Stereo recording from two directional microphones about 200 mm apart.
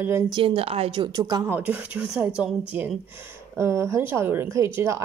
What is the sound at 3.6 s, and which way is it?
Speech, 15° right (ahead or behind).